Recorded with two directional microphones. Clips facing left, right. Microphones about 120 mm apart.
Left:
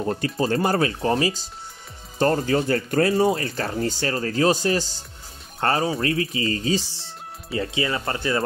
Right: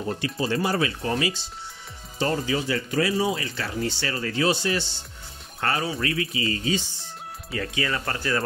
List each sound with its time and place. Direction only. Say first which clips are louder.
0.2 s speech: left 2 dB; 45° left (ahead or behind)
2.1 s speech: left 5 dB; 50° left (ahead or behind)
7.5 s speech: left 3 dB; 25° left (ahead or behind)